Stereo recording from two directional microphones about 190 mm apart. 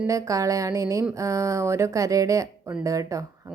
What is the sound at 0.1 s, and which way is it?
A woman's voice, 15° right (ahead or behind).